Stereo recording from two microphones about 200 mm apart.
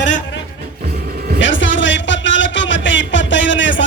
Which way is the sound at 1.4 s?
70° left (ahead or behind).